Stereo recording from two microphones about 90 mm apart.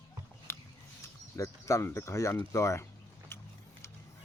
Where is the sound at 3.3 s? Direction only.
25° left (ahead or behind).